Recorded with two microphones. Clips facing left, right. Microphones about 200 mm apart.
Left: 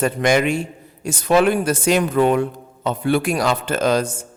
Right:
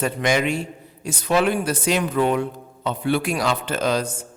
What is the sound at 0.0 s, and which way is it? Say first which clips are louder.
Speech: left 4 dB; 50° left (ahead or behind).